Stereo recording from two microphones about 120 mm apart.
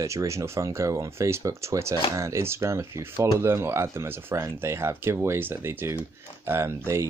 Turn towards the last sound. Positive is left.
turn(degrees=-20)  # may be behind; listen again after turning